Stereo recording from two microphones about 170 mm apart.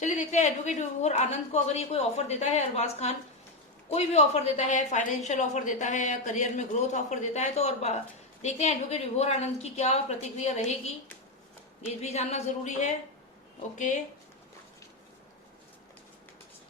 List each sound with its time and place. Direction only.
0.0 s a woman's voice: 45° left (ahead or behind)
12.0 s a woman's voice: 40° left (ahead or behind)